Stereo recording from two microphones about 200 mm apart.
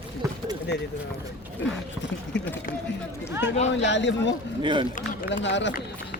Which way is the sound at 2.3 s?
60° left (ahead or behind).